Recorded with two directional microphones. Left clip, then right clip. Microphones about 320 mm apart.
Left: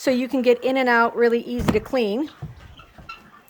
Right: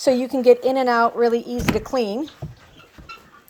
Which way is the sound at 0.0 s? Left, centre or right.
Centre.